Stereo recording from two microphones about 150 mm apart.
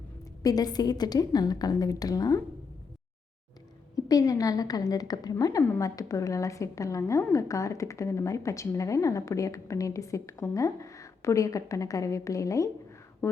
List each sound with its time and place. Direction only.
0.4 s a woman's voice: 25° left (ahead or behind)
3.9 s a woman's voice: 25° left (ahead or behind)